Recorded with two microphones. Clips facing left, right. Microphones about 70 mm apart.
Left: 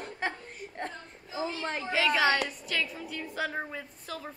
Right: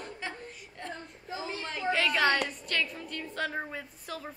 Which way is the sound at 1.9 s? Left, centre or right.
Centre.